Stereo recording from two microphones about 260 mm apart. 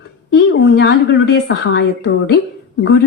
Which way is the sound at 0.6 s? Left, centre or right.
Left.